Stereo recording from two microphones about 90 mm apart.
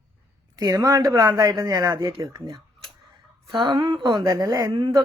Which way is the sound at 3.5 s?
60° right (ahead or behind).